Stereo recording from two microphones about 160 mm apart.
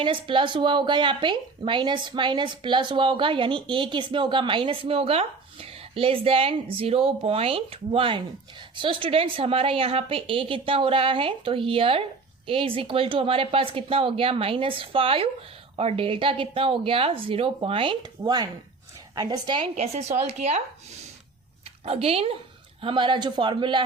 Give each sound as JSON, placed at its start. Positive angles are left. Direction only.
{"t": 0.0, "sound": "a man's voice", "side_deg": -30}
{"t": 19.7, "sound": "a man's voice", "side_deg": -45}